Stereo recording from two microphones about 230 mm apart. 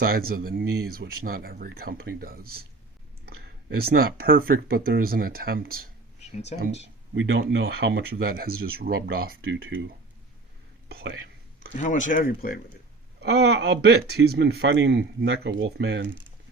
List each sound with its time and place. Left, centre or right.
0.0 s speech: right
3.8 s speech: right
6.5 s speech: left
7.1 s speech: right
10.8 s speech: right
11.8 s speech: left
13.1 s speech: right